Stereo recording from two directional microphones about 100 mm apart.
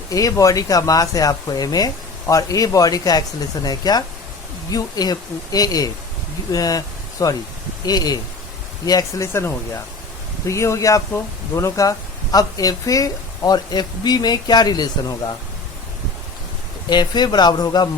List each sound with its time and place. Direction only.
0.1 s speech: 35° left (ahead or behind)
16.9 s speech: 45° left (ahead or behind)